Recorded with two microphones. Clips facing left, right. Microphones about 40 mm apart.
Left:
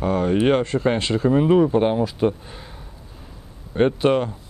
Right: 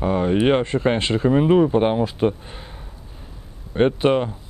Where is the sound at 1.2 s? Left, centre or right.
Centre.